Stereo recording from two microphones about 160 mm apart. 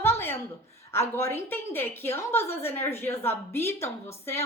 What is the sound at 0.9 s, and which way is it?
A woman's voice, 15° left (ahead or behind).